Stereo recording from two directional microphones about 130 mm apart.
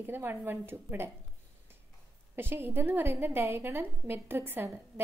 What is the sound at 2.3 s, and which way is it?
A woman's voice, 20° right (ahead or behind).